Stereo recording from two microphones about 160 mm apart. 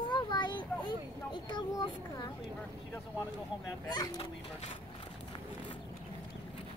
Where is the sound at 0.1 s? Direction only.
30° left (ahead or behind).